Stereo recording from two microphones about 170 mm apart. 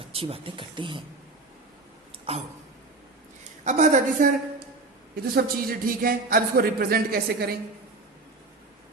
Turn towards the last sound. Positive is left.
turn(degrees=-65)  # may be behind; listen again after turning